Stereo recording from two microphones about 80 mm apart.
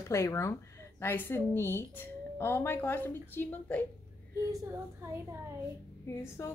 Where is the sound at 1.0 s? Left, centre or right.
Left.